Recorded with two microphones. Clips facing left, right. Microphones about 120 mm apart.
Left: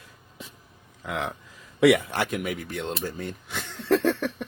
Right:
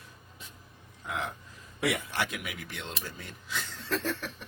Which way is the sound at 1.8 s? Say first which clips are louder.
Left 11 dB; 70° left (ahead or behind).